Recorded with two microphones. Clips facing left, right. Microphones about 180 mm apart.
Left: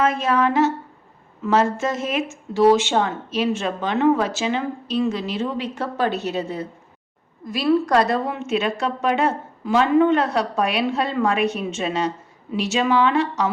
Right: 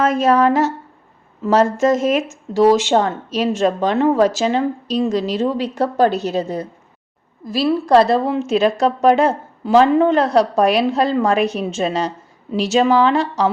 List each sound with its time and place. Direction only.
0.0 s a woman's voice: 40° right (ahead or behind)